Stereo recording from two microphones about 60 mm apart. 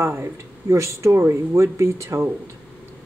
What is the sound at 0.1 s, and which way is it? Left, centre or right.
Speech, right.